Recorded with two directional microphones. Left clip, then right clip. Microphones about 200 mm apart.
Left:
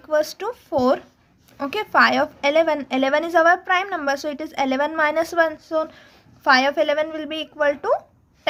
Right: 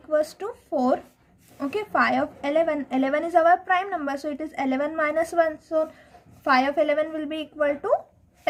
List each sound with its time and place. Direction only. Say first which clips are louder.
0.1 s a woman's voice: left 3 dB; 30° left (ahead or behind)